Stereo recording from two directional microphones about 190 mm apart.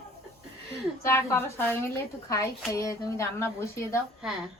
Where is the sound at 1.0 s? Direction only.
15° left (ahead or behind).